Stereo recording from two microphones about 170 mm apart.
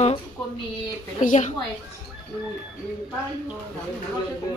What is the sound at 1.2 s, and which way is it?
Speech, 50° left (ahead or behind).